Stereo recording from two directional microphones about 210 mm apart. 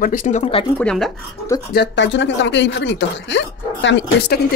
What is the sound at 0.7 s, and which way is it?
Speech, 5° left (ahead or behind).